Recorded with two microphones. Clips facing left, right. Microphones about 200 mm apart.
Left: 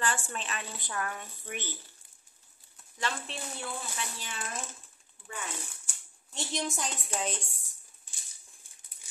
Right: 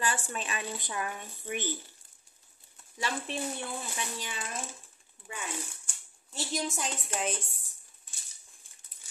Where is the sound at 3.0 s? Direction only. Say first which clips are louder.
Right 3 dB; 15° right (ahead or behind).